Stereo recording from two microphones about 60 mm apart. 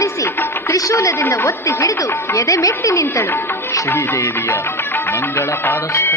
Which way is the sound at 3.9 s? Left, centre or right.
Left.